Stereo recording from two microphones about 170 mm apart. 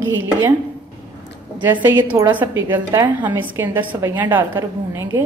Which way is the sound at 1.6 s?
10° right (ahead or behind).